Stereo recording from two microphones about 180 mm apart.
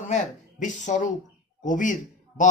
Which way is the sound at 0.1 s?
45° left (ahead or behind).